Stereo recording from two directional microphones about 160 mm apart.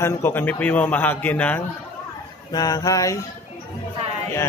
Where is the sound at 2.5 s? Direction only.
25° left (ahead or behind).